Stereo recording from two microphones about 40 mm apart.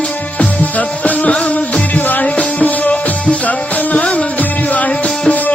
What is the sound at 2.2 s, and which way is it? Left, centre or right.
Music, left.